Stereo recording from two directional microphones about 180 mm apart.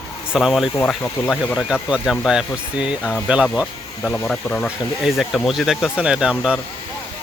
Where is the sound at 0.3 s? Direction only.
Centre (ahead or behind).